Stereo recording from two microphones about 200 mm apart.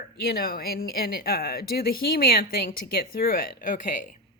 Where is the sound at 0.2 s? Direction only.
50° left (ahead or behind).